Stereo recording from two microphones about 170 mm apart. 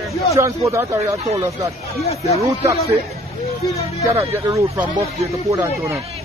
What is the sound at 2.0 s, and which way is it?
Speech, 35° left (ahead or behind).